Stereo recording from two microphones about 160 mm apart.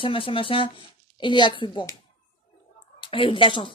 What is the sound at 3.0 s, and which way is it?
Speech, 35° left (ahead or behind).